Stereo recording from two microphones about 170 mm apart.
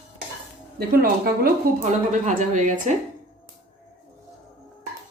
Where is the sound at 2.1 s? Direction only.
50° right (ahead or behind).